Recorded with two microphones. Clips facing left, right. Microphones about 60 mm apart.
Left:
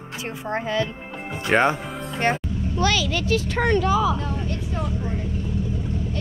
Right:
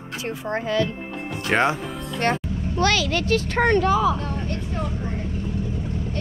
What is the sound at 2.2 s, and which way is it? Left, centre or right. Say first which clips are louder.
Speech: even; centre.